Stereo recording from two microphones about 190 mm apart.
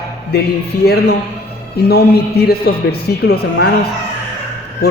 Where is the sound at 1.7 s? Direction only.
60° left (ahead or behind).